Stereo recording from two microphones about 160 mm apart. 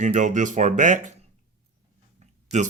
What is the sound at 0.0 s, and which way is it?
Speech, 50° right (ahead or behind).